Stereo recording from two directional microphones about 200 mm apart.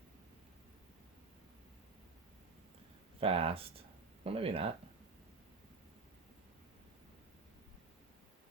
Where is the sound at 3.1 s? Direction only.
30° right (ahead or behind).